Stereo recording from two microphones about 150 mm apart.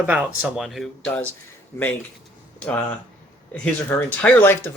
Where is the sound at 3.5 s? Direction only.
10° left (ahead or behind).